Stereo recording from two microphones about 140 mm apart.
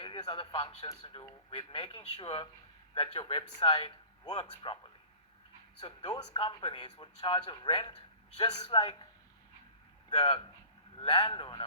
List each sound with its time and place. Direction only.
0.0 s a man's voice: 35° left (ahead or behind)
8.4 s a man's voice: 50° left (ahead or behind)
10.2 s speech: 35° left (ahead or behind)